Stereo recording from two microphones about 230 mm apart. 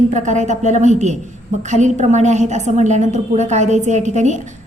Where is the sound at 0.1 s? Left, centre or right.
Right.